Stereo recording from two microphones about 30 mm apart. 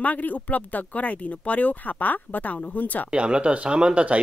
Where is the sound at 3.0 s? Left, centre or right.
Right.